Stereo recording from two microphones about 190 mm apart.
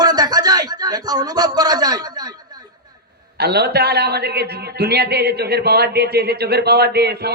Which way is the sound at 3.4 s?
60° right (ahead or behind).